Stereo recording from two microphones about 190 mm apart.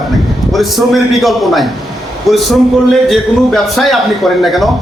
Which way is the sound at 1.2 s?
Centre (ahead or behind).